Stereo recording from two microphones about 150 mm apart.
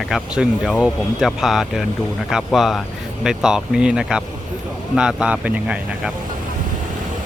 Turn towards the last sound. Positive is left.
turn(degrees=-10)  # may be behind; listen again after turning